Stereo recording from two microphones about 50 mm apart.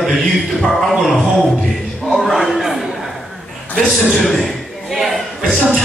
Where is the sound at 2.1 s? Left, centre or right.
Centre.